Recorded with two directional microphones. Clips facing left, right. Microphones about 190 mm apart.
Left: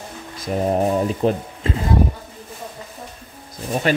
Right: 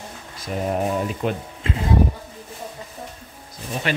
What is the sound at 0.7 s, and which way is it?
Speech, 30° left (ahead or behind).